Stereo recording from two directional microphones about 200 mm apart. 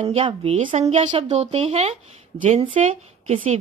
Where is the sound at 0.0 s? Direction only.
30° right (ahead or behind).